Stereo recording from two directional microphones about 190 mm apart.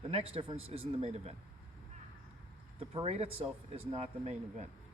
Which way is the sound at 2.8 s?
35° right (ahead or behind).